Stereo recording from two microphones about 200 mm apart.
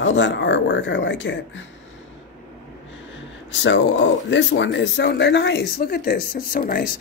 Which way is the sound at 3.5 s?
65° left (ahead or behind).